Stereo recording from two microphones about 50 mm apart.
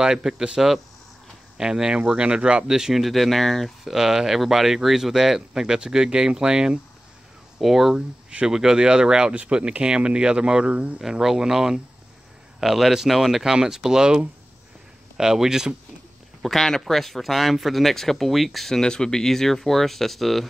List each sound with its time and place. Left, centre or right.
0.0 s speech: centre
8.3 s speech: centre
11.0 s speech: centre
16.4 s speech: centre
18.8 s speech: centre